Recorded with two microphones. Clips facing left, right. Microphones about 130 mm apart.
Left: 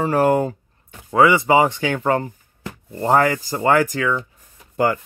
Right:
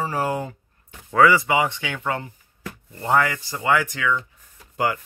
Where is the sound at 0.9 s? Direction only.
25° left (ahead or behind).